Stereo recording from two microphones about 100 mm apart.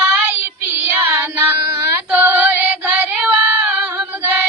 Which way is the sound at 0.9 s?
20° right (ahead or behind).